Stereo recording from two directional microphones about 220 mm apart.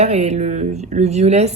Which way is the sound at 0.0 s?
30° right (ahead or behind).